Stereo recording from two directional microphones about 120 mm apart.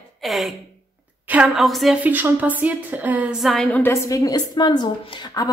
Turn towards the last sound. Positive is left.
turn(degrees=35)  # may be behind; listen again after turning